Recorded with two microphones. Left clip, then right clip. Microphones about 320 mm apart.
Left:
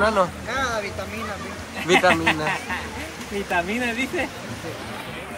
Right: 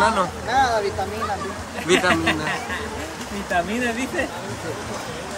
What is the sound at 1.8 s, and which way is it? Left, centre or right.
Speech, centre.